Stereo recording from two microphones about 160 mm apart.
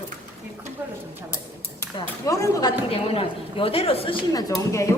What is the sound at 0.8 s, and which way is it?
Speech, 10° right (ahead or behind).